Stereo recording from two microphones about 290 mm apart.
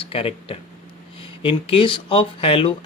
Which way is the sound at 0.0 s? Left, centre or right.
Centre.